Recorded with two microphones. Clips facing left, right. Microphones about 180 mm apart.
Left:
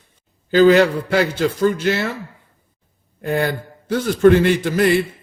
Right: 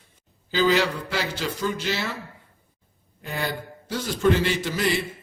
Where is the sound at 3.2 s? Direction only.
55° left (ahead or behind).